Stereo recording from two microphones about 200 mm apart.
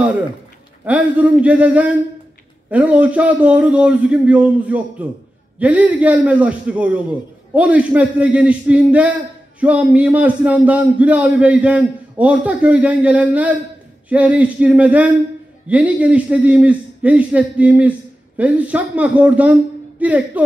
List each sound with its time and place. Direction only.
0.8 s a man's voice: 5° right (ahead or behind)